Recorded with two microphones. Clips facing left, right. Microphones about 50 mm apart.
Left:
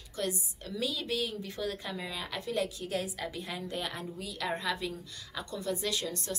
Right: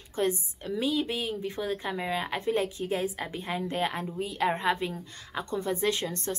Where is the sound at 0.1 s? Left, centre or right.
Right.